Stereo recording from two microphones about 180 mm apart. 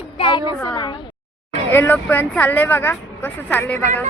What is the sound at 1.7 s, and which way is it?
Speech, 10° left (ahead or behind).